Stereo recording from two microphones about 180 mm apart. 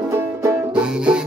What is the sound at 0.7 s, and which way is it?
Music, 5° right (ahead or behind).